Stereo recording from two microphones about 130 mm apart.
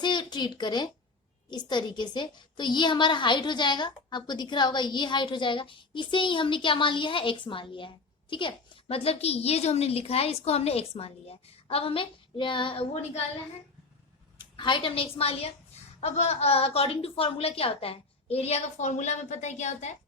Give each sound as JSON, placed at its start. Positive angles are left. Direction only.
{"t": 0.0, "sound": "a woman's voice", "side_deg": 35}
{"t": 14.3, "sound": "a woman's voice", "side_deg": 35}